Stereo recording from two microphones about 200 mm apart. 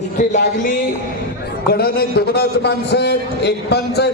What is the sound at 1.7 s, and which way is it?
A man's voice, 50° left (ahead or behind).